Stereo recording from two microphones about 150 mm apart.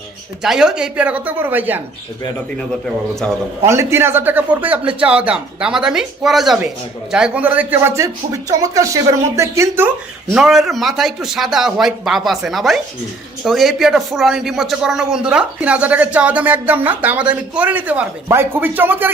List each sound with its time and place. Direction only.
0.4 s speech: 5° right (ahead or behind)
2.6 s speech: 5° left (ahead or behind)
3.6 s speech: 20° right (ahead or behind)
10.3 s speech: centre (ahead or behind)